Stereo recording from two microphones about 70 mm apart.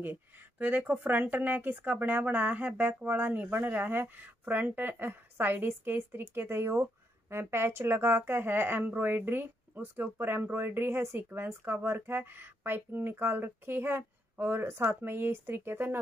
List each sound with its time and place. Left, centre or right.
0.0 s speech: right